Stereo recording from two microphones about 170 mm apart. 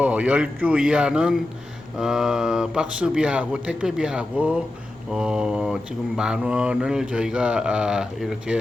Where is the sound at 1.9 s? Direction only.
5° right (ahead or behind).